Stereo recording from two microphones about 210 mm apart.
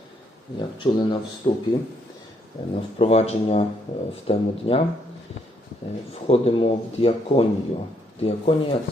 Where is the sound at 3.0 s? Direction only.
30° left (ahead or behind).